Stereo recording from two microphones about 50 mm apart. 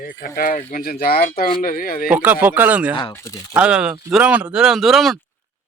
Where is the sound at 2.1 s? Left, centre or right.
Right.